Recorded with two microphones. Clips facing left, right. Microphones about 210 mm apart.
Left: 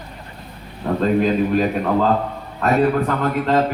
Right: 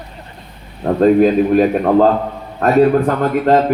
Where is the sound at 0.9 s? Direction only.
50° right (ahead or behind).